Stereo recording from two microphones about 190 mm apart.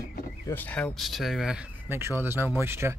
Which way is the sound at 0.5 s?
10° left (ahead or behind).